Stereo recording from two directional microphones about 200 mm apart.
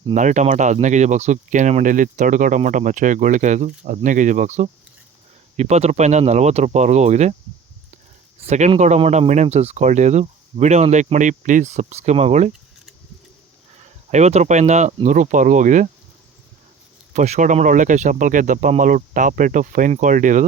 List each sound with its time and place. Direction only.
0.0 s speech: 35° right (ahead or behind)
8.4 s speech: 35° right (ahead or behind)
14.1 s speech: 35° right (ahead or behind)
17.2 s speech: 35° right (ahead or behind)